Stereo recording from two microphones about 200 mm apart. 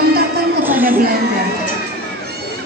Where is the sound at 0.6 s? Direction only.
10° right (ahead or behind).